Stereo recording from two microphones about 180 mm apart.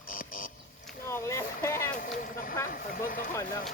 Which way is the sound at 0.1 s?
50° left (ahead or behind).